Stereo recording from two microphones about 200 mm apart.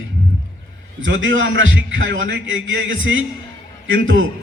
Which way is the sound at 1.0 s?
70° right (ahead or behind).